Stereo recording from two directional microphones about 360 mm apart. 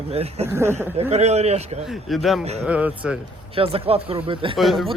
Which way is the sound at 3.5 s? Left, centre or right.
Centre.